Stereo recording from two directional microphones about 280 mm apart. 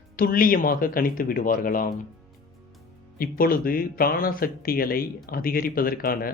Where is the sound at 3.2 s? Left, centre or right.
Left.